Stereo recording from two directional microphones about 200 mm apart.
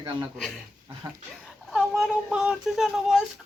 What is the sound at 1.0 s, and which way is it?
Speech, 20° right (ahead or behind).